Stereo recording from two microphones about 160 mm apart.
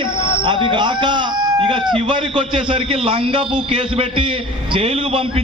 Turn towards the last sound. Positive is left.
turn(degrees=-35)  # may be behind; listen again after turning